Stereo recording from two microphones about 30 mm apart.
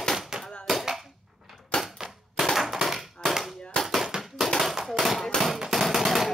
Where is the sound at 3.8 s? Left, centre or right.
Left.